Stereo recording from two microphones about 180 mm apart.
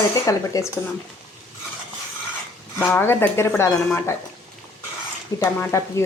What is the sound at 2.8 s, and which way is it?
Speech, 10° left (ahead or behind).